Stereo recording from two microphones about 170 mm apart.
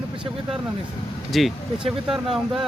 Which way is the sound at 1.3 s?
Centre (ahead or behind).